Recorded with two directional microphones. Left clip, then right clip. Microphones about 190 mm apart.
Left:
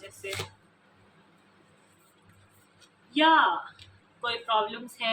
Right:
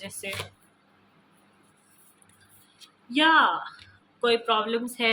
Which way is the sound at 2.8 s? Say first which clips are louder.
Right 1 dB; 65° right (ahead or behind).